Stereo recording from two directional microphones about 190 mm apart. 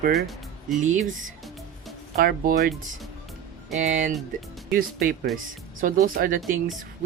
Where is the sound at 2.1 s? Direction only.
50° right (ahead or behind).